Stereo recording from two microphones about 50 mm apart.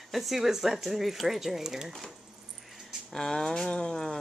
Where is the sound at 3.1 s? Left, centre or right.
Centre.